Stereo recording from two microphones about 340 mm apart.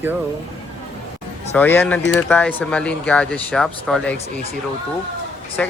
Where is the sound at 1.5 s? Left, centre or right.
Centre.